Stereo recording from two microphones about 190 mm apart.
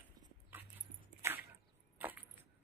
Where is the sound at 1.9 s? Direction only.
10° right (ahead or behind).